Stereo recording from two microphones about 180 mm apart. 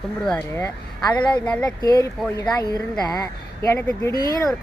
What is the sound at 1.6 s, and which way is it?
A woman's voice, 20° left (ahead or behind).